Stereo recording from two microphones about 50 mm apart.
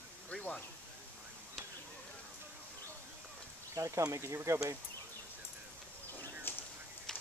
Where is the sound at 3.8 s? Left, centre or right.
Right.